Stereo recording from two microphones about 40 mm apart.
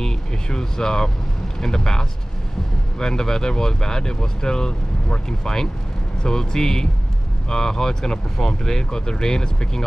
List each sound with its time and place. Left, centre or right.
0.0 s speech: centre